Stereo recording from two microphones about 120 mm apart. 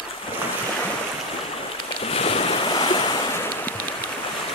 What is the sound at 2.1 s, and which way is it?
Waves, 55° left (ahead or behind).